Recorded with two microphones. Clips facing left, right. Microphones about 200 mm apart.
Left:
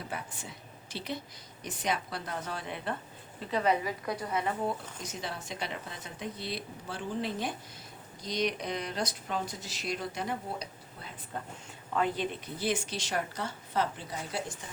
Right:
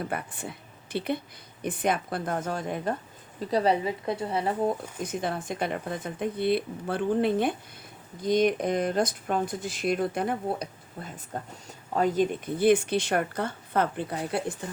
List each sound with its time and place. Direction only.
0.0 s a woman's voice: 60° right (ahead or behind); by 4.8 s 35° right (ahead or behind)
5.0 s a woman's voice: 55° right (ahead or behind)